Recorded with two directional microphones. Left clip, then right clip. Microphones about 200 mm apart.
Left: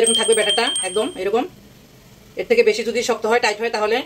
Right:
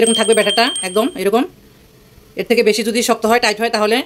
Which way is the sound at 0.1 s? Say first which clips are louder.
Right 3 dB; 50° right (ahead or behind).